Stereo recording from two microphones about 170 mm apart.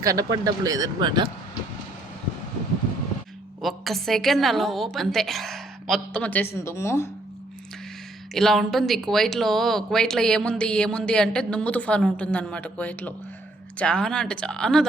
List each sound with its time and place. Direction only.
0.0 s speech: 20° right (ahead or behind)
3.6 s speech: centre (ahead or behind); by 7.1 s 15° left (ahead or behind)
8.3 s speech: centre (ahead or behind)